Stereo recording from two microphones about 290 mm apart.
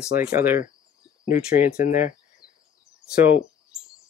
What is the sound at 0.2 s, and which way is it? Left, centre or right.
Speech, centre.